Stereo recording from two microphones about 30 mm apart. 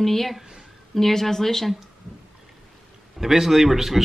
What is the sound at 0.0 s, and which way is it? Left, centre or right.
A woman's voice, centre.